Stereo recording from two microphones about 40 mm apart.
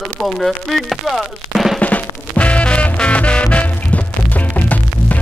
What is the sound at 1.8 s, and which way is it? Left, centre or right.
Music, left.